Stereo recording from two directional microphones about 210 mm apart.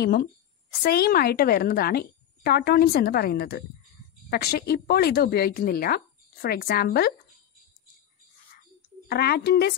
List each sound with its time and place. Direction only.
0.0 s a woman's voice: 45° left (ahead or behind)
9.1 s a woman's voice: 50° left (ahead or behind)